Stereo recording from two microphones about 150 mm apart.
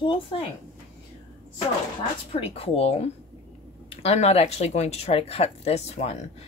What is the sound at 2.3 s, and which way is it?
Speech, 40° left (ahead or behind).